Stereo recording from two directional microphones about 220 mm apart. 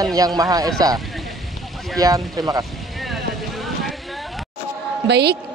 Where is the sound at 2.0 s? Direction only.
15° right (ahead or behind).